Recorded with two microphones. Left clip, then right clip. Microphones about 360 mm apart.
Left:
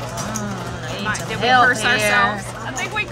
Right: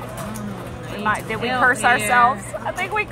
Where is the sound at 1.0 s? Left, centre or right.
Centre.